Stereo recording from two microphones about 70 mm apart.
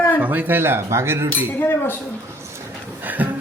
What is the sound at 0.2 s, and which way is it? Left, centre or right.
Speech, right.